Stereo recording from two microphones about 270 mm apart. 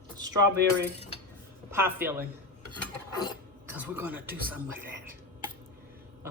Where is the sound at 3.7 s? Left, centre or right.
Centre.